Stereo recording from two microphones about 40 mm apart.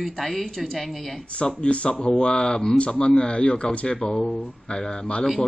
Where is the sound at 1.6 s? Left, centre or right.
Left.